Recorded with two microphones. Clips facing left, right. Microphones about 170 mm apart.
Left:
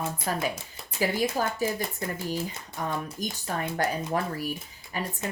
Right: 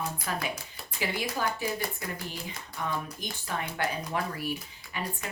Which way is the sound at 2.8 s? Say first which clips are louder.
Left 3 dB; 40° left (ahead or behind).